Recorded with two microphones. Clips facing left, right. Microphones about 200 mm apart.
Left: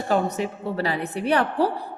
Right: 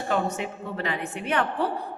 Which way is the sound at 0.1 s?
35° left (ahead or behind).